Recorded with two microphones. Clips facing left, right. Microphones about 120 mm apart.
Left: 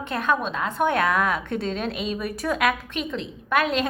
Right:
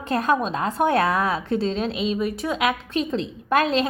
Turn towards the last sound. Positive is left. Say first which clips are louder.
# right 2 dB
turn(degrees=-35)  # may be behind; listen again after turning